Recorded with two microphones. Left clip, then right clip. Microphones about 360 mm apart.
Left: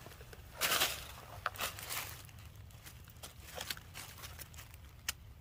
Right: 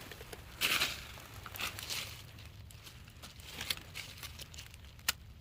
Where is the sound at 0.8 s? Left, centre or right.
Left.